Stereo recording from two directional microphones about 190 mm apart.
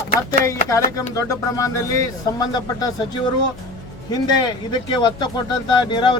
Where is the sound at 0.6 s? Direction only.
15° left (ahead or behind).